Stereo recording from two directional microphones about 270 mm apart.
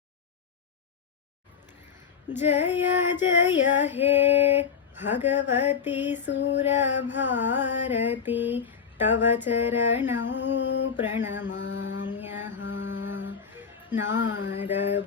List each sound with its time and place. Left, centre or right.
2.3 s female singing: centre
6.2 s a sound: left
6.6 s female singing: centre
10.2 s a sound: left
10.9 s female singing: centre
11.5 s mantra: left
12.2 s music: centre
12.5 s music: left
14.2 s a sound: left
14.6 s female singing: centre